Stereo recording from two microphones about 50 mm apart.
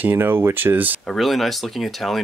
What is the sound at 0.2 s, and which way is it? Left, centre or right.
Speech, right.